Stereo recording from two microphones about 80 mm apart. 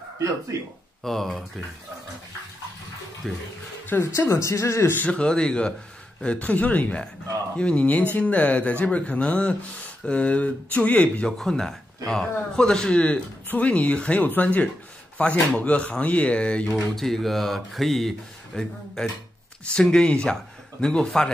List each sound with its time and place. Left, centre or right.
1.0 s speech: centre
3.3 s speech: centre
4.0 s speech: left
4.9 s speech: centre
11.2 s speech: centre
16.7 s speech: centre